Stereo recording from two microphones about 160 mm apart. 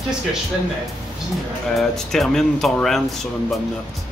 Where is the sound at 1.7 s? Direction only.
5° left (ahead or behind).